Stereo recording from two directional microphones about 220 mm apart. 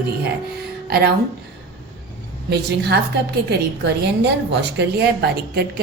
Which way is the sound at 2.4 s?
50° right (ahead or behind).